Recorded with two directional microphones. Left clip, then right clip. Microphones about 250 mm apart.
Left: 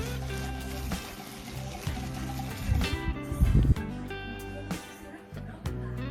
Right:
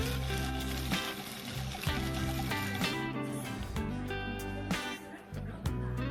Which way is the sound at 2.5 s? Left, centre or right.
Centre.